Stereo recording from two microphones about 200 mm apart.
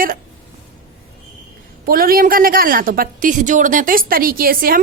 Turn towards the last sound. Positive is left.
turn(degrees=-45)  # may be behind; listen again after turning